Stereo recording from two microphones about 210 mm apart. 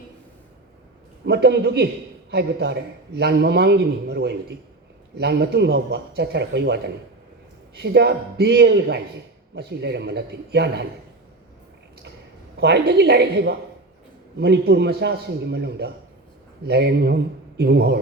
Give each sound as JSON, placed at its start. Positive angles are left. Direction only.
{"t": 1.2, "sound": "a man's voice", "side_deg": -55}
{"t": 12.5, "sound": "a man's voice", "side_deg": -55}